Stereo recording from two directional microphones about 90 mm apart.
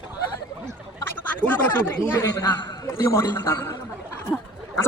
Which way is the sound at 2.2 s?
40° left (ahead or behind).